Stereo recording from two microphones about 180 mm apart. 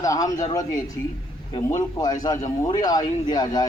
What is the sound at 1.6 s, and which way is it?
Speech, 20° left (ahead or behind).